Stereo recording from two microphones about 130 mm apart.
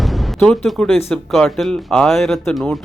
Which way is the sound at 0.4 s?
5° left (ahead or behind).